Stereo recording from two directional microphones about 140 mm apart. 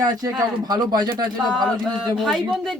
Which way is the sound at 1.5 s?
Centre (ahead or behind).